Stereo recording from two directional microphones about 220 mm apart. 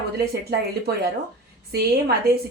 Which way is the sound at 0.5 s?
45° right (ahead or behind).